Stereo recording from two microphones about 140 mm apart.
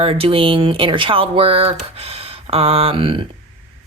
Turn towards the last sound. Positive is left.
turn(degrees=-40)  # may be behind; listen again after turning